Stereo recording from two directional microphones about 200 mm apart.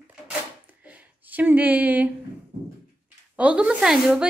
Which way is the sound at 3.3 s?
5° right (ahead or behind).